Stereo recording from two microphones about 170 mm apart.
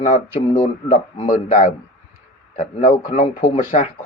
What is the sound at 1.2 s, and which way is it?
Speech, 45° left (ahead or behind).